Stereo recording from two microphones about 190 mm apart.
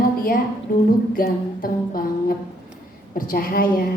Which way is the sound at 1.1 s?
50° left (ahead or behind).